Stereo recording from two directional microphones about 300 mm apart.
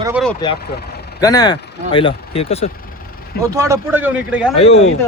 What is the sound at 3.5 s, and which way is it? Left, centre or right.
Speech, centre.